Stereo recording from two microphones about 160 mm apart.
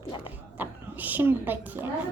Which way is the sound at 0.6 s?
10° right (ahead or behind).